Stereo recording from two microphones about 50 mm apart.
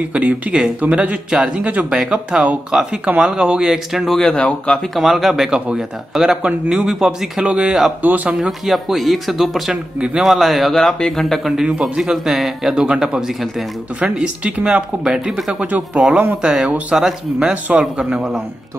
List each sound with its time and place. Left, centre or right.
0.1 s speech: right
1.7 s speech: right; by 4.2 s centre
4.3 s speech: left
4.9 s speech: centre
6.4 s speech: centre
7.4 s speech: right
8.5 s speech: centre
9.9 s speech: centre
10.2 s speech: centre
10.8 s speech: centre
11.5 s speech: centre
14.2 s speech: right
15.6 s speech: right
16.4 s speech: centre